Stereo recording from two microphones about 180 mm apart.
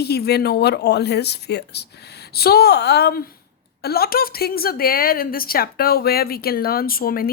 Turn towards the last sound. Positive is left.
turn(degrees=55)  # may be behind; listen again after turning